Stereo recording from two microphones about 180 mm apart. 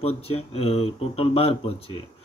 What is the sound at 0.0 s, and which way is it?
Speech, 35° left (ahead or behind).